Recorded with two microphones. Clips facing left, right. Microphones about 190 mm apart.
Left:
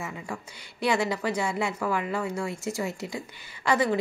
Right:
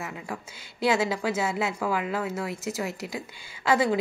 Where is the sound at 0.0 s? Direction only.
5° right (ahead or behind).